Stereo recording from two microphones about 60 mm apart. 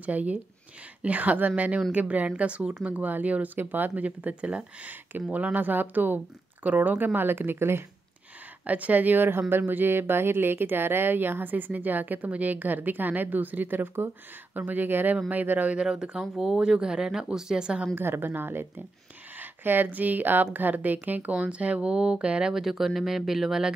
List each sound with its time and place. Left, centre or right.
0.0 s speech: right
8.6 s speech: right
15.8 s speech: centre
17.9 s speech: right; by 23.7 s centre